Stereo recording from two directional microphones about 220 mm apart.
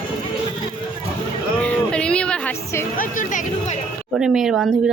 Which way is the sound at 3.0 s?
35° left (ahead or behind).